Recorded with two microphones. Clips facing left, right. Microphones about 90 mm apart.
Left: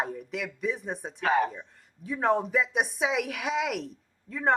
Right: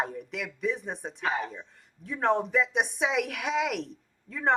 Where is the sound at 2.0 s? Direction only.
Centre (ahead or behind).